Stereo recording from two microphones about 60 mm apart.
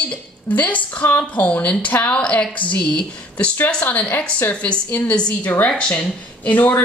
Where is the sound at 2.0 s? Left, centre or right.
Centre.